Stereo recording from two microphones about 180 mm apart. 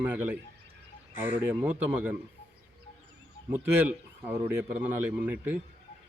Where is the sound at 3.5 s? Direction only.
10° right (ahead or behind).